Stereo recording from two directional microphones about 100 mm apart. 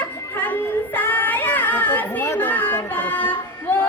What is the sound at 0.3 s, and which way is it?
Child singing, 20° left (ahead or behind).